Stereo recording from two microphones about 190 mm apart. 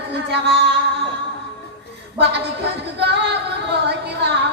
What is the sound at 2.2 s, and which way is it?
Speech, 60° right (ahead or behind).